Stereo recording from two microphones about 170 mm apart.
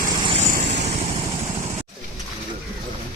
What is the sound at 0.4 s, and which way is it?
Vehicle, 45° right (ahead or behind).